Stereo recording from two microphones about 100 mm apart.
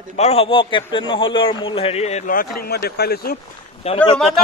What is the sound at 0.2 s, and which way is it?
A man's voice, 80° left.